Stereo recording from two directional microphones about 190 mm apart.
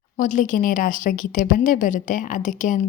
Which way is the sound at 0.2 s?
40° left (ahead or behind).